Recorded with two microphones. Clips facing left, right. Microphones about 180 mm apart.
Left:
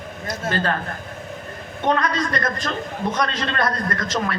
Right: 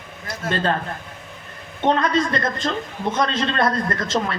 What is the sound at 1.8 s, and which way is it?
A man's voice, 25° right (ahead or behind).